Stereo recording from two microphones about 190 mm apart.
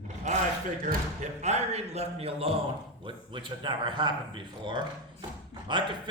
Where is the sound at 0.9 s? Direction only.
40° right (ahead or behind).